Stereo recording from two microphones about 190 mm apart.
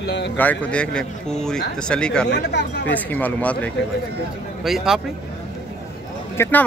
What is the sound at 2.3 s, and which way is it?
Speech, 60° left (ahead or behind).